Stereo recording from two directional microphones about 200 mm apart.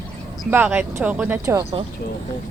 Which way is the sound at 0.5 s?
10° right (ahead or behind).